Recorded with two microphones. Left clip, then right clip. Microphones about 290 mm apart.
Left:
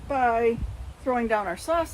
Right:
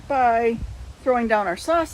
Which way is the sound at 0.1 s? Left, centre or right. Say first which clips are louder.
Right 4 dB; right.